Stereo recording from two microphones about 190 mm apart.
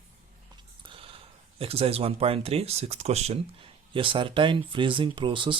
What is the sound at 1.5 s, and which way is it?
Speech, 30° right (ahead or behind).